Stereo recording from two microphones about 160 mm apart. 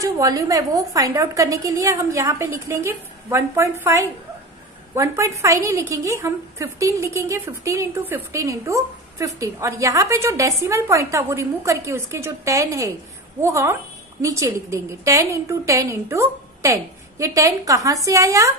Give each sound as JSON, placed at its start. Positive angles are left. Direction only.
{"t": 0.0, "sound": "a woman's voice", "side_deg": -20}